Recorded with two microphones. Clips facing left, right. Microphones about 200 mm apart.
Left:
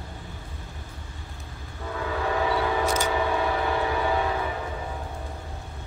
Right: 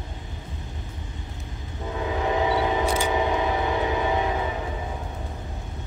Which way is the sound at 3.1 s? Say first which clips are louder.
Right 2 dB; 20° right (ahead or behind).